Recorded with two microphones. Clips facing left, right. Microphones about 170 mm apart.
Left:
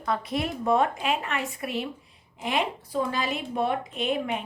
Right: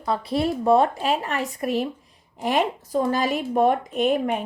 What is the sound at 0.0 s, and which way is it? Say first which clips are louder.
A woman's voice: right 5 dB; 30° right (ahead or behind).